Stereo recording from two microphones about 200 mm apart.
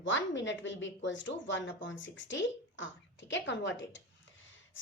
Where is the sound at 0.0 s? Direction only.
70° left (ahead or behind).